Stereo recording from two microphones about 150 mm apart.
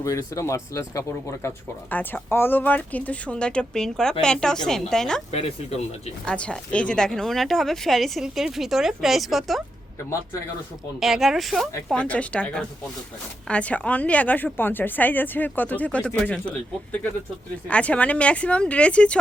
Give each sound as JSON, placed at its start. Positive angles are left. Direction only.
{"t": 0.0, "sound": "speech", "side_deg": 20}
{"t": 5.3, "sound": "speech", "side_deg": 45}
{"t": 6.2, "sound": "speech", "side_deg": 5}
{"t": 11.0, "sound": "speech", "side_deg": 0}